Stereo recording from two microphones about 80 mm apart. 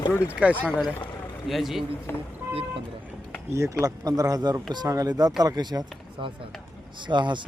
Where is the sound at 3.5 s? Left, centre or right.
Right.